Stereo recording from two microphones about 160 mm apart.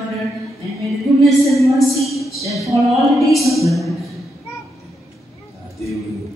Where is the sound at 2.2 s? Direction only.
20° left (ahead or behind).